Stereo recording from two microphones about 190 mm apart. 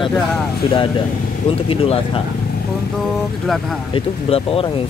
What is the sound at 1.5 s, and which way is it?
Speech, 30° left (ahead or behind).